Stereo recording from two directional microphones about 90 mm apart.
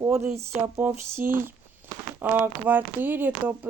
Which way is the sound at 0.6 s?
20° right (ahead or behind).